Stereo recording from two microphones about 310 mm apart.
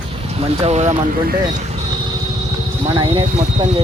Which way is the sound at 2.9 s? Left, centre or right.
Centre.